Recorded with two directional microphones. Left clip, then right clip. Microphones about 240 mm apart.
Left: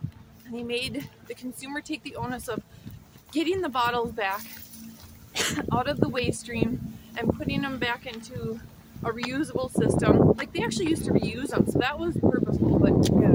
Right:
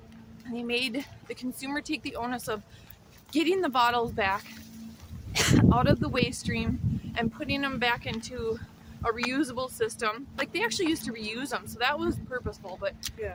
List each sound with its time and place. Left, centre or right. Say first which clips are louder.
0.5 s speech: right 1 dB; centre